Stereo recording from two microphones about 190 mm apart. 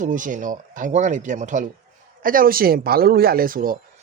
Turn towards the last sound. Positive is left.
turn(degrees=-50)  # may be behind; listen again after turning